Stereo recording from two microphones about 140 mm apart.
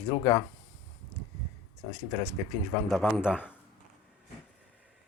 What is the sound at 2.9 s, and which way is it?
Speech, centre (ahead or behind).